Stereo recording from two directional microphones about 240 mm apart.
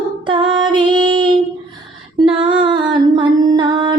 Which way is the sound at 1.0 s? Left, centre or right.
Centre.